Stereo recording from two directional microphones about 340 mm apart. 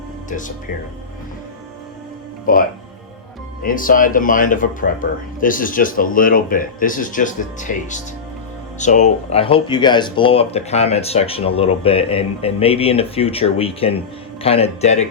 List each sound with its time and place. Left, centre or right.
0.3 s speech: left
2.5 s speech: left